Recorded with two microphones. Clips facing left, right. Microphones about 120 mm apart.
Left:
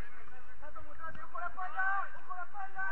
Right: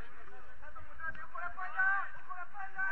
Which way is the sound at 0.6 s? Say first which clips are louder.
Even; 20° left (ahead or behind).